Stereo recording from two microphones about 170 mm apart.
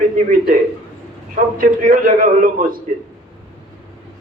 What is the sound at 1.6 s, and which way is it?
A man's voice, 55° right (ahead or behind).